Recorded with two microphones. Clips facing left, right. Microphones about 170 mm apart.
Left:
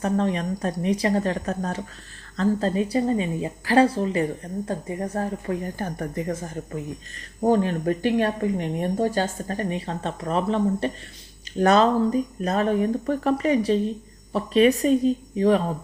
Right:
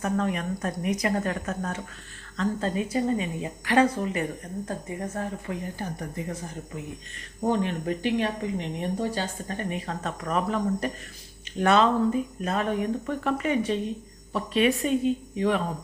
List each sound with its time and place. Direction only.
0.0 s a woman's voice: 30° left (ahead or behind); by 6.3 s 55° left (ahead or behind)
7.4 s a woman's voice: 40° left (ahead or behind)